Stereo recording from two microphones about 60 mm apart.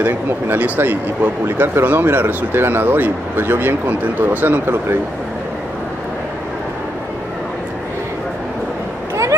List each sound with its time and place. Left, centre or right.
0.0 s speech: right